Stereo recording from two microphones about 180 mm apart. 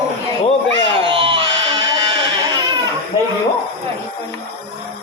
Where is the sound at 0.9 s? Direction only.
30° right (ahead or behind).